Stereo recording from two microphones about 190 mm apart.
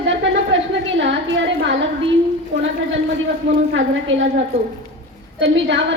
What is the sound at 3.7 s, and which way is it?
Speech, 85° right.